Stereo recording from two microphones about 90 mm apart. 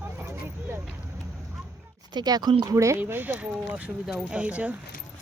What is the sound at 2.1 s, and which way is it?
Speech, 50° right (ahead or behind).